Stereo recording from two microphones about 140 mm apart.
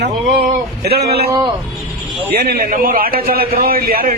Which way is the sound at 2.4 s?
90° right.